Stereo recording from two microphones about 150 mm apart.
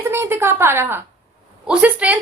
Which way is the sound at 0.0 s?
15° right (ahead or behind).